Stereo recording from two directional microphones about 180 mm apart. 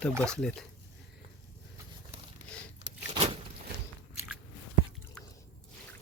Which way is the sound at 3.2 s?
25° right (ahead or behind).